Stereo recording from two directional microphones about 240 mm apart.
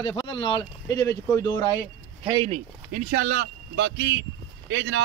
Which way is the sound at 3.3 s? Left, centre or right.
Right.